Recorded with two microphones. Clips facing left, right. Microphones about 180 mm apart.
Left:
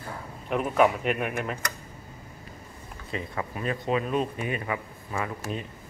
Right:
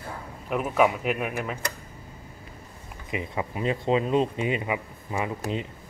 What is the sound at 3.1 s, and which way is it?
Speech, 20° right (ahead or behind).